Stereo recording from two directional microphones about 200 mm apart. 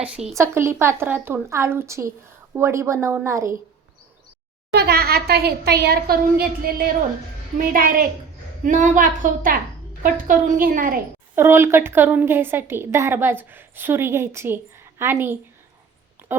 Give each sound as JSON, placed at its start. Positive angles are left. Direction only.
{"t": 0.0, "sound": "a woman's voice", "side_deg": -5}
{"t": 4.7, "sound": "a woman's voice", "side_deg": -55}
{"t": 11.3, "sound": "a woman's voice", "side_deg": -10}